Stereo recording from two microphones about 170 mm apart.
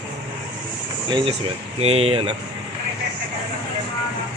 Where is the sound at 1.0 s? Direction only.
30° right (ahead or behind).